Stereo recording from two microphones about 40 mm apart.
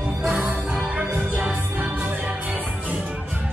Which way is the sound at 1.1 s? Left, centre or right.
Right.